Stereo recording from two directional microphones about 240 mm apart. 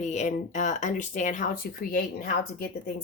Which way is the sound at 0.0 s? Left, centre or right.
Left.